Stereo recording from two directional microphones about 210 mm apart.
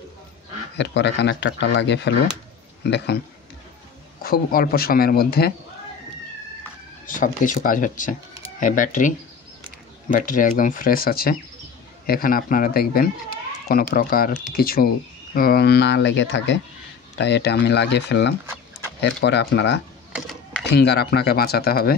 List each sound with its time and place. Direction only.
0.7 s speech: 55° left (ahead or behind)
4.2 s speech: 45° left (ahead or behind)
7.1 s speech: 40° left (ahead or behind); by 19.8 s 55° left (ahead or behind)
20.1 s a sound: centre (ahead or behind)
20.6 s speech: 50° left (ahead or behind)